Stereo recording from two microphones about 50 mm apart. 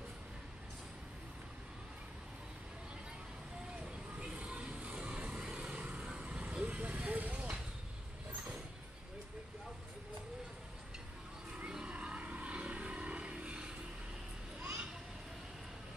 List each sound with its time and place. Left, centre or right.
3.8 s music: centre
11.5 s vehicle: right
14.6 s children playing: right